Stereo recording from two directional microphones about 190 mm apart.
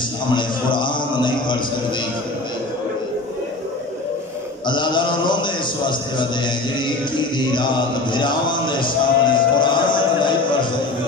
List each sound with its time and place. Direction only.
0.3 s a man's voice: 25° left (ahead or behind)
4.6 s a man's voice: 25° left (ahead or behind)